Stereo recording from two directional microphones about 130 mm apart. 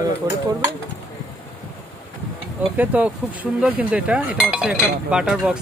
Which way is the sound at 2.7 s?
10° right (ahead or behind).